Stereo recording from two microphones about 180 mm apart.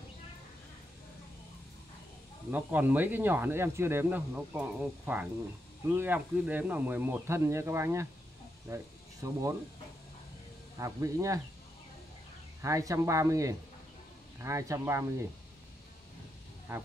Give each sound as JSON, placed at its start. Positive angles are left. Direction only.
{"t": 2.5, "sound": "speech", "side_deg": -10}
{"t": 10.8, "sound": "speech", "side_deg": -15}
{"t": 12.6, "sound": "speech", "side_deg": -15}